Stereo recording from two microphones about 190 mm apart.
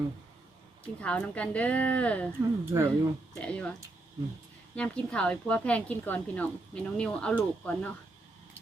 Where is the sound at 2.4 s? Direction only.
15° right (ahead or behind).